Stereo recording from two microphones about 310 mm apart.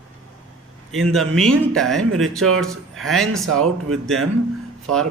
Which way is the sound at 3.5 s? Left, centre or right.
Right.